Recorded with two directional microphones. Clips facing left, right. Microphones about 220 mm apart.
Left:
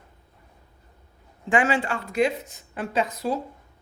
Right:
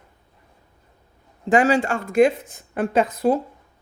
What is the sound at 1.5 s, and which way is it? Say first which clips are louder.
Speech: right 5 dB; 40° right (ahead or behind).